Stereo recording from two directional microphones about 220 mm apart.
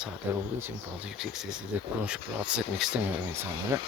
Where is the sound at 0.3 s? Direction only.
10° right (ahead or behind).